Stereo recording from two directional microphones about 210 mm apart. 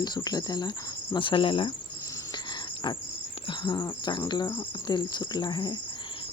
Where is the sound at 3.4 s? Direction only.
20° left (ahead or behind).